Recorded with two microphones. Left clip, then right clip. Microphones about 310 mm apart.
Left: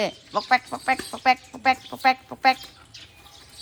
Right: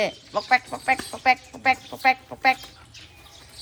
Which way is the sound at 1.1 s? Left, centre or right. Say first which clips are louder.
Even; centre.